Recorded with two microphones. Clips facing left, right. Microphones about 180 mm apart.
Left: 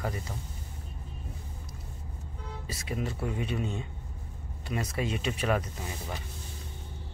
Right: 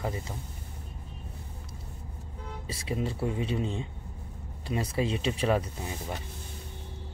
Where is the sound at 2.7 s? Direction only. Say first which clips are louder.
Right 2 dB; 30° right (ahead or behind).